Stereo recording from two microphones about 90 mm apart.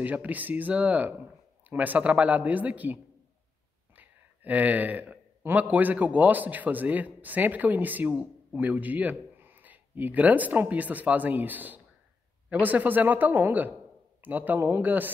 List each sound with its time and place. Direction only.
0.0 s speech: 20° right (ahead or behind)